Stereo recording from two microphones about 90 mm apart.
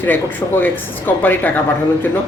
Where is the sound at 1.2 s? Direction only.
20° left (ahead or behind).